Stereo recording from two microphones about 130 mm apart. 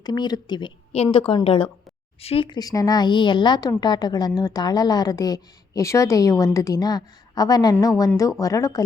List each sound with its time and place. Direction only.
0.0 s a woman's voice: 30° left (ahead or behind)